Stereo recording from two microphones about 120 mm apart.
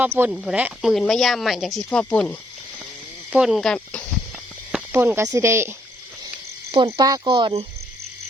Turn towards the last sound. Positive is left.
turn(degrees=-40)  # may be behind; listen again after turning